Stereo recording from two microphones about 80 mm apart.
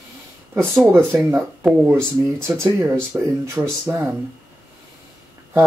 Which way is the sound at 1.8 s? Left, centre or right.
Right.